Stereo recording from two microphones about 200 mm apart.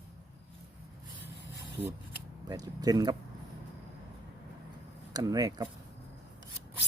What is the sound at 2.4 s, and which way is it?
Speech, 20° right (ahead or behind).